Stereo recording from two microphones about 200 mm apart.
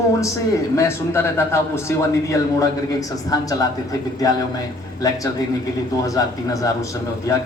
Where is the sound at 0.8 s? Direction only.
10° left (ahead or behind).